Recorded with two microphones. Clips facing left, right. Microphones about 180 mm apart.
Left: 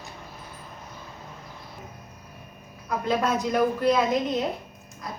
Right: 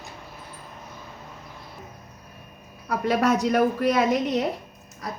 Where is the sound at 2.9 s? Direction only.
70° right (ahead or behind).